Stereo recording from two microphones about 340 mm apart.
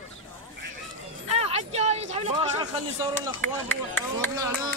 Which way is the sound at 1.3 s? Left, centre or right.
Centre.